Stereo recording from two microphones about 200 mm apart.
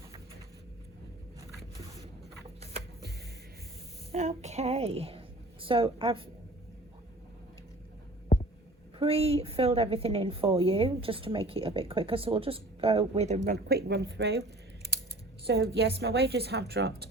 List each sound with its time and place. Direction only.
4.1 s a sound: 35° right (ahead or behind)
5.6 s a woman's voice: 25° right (ahead or behind)
9.0 s a woman's voice: 30° right (ahead or behind)
13.7 s a woman's voice: 55° right (ahead or behind)
15.4 s a woman's voice: 55° right (ahead or behind)